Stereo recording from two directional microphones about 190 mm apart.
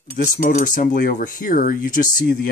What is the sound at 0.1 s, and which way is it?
Speech, 40° left (ahead or behind).